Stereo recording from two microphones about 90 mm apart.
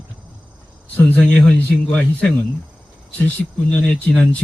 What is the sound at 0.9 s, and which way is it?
Speech, 15° left (ahead or behind).